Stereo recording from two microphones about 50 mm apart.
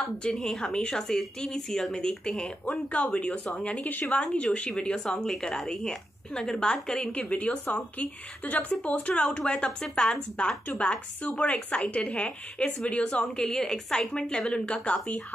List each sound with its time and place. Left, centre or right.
0.2 s a woman's voice: centre
2.6 s a woman's voice: left